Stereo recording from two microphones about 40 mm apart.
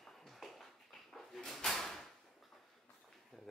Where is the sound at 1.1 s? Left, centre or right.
Centre.